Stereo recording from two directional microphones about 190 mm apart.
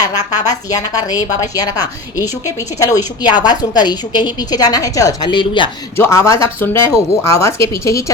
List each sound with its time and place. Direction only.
0.0 s a woman's voice: 20° left (ahead or behind)
6.0 s speech: 15° left (ahead or behind)